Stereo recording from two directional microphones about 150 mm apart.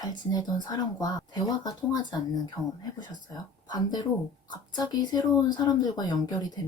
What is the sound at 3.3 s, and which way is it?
A woman's voice, 25° left (ahead or behind).